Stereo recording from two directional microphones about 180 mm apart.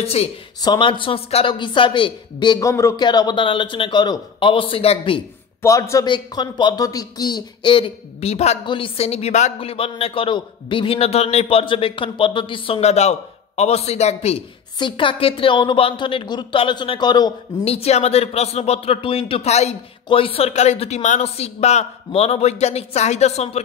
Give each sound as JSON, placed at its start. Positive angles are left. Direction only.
{"t": 0.0, "sound": "speech", "side_deg": 35}
{"t": 5.6, "sound": "speech", "side_deg": 15}
{"t": 17.6, "sound": "speech", "side_deg": 35}